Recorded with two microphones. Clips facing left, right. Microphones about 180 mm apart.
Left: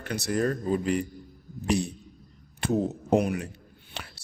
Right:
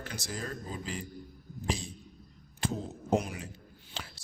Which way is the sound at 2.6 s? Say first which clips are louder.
Left 9 dB; 65° left (ahead or behind).